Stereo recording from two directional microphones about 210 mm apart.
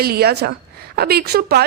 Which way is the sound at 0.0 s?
50° right (ahead or behind).